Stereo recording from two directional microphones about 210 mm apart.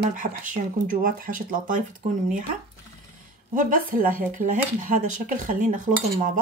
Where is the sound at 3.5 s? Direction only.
40° right (ahead or behind).